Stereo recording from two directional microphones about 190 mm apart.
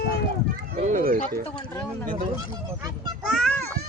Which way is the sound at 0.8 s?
40° right (ahead or behind).